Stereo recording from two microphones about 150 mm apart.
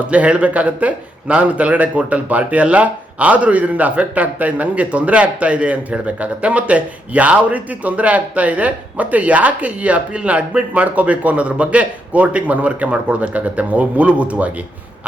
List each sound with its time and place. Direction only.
0.1 s a man's voice: 10° right (ahead or behind)